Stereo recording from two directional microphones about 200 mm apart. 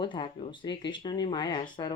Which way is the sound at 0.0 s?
25° left (ahead or behind).